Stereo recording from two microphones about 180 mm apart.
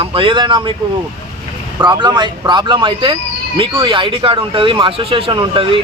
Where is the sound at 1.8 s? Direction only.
25° right (ahead or behind).